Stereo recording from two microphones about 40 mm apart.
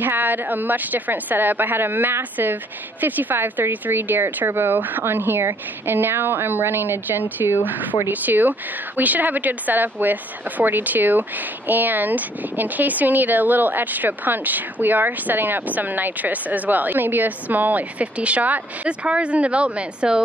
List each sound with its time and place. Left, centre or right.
0.0 s speech: right
4.7 s speech: right
5.0 s a woman's voice: right